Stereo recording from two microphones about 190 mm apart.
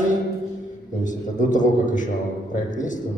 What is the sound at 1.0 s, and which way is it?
A man's voice, 40° left (ahead or behind).